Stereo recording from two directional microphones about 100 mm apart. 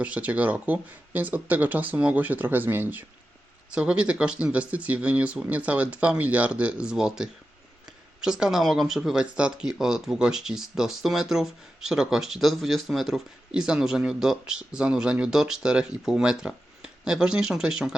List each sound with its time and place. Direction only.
0.0 s speech: 15° right (ahead or behind)